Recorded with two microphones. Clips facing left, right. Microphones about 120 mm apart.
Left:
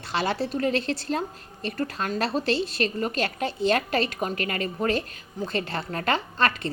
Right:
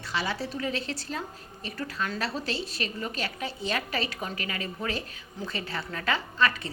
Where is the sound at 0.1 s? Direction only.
65° left (ahead or behind).